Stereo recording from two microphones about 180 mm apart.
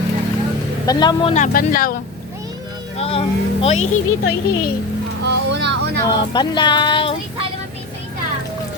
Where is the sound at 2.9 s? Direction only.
30° left (ahead or behind).